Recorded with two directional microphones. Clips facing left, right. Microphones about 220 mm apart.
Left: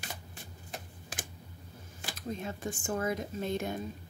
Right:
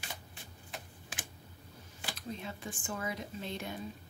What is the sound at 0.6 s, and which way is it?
Tick-tock, 40° left (ahead or behind).